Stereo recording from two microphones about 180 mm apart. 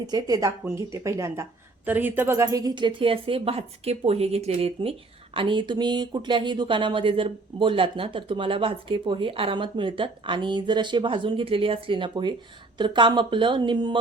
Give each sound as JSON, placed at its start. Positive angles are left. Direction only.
{"t": 0.0, "sound": "speech", "side_deg": -20}